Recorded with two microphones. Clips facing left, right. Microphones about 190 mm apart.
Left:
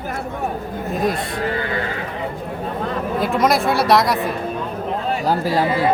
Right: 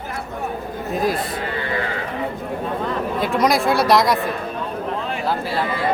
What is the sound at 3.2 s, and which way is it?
Speech, centre (ahead or behind).